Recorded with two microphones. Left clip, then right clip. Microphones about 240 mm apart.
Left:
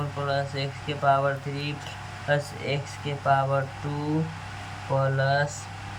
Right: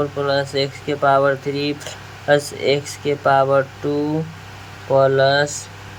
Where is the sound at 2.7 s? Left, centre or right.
Right.